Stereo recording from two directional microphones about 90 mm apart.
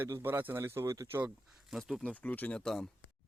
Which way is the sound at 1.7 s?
Centre (ahead or behind).